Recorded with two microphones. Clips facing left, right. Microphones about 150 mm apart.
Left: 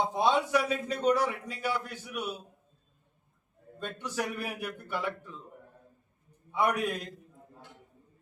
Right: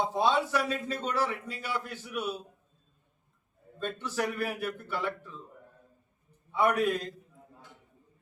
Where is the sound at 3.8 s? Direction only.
15° left (ahead or behind).